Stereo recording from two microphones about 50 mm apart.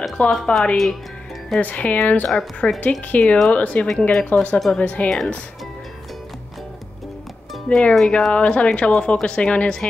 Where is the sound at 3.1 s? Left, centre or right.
Left.